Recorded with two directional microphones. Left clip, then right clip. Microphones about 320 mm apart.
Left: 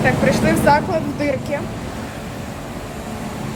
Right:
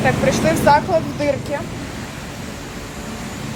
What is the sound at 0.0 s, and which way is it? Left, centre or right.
Speech, centre.